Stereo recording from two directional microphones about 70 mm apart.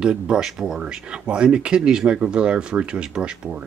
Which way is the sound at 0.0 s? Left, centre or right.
Centre.